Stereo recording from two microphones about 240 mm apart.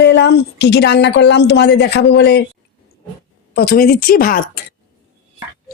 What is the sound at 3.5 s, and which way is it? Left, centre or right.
A woman's voice, left.